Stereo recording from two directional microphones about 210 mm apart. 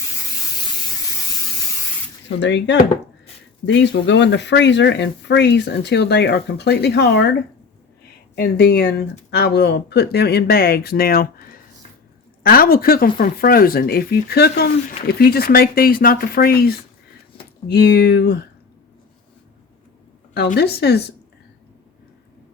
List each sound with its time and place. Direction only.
2.4 s speech: 55° left (ahead or behind)
8.4 s speech: 50° left (ahead or behind)
20.3 s speech: 50° left (ahead or behind)